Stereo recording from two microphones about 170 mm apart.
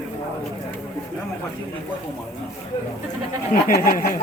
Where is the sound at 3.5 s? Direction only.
55° left (ahead or behind).